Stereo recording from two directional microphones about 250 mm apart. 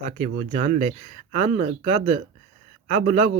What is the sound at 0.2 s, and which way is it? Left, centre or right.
Speech, right.